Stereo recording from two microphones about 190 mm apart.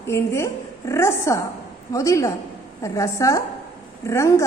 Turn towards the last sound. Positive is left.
turn(degrees=15)  # may be behind; listen again after turning